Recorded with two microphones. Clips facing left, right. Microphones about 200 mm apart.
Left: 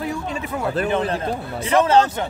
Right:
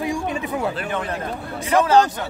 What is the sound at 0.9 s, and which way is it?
Speech, 30° left (ahead or behind).